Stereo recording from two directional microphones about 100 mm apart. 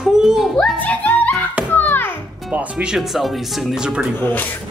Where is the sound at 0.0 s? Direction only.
5° right (ahead or behind).